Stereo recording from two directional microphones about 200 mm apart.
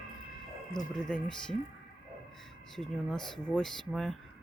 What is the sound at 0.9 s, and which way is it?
Speech, 5° left (ahead or behind).